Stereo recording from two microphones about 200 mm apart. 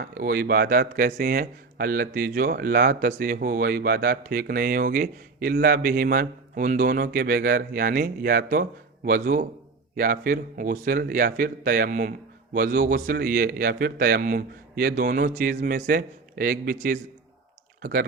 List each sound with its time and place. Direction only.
0.0 s speech: 50° right (ahead or behind)